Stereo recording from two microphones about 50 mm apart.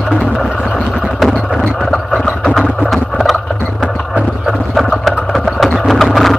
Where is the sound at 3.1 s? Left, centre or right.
Centre.